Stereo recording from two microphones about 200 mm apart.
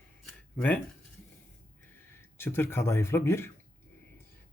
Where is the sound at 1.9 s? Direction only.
10° left (ahead or behind).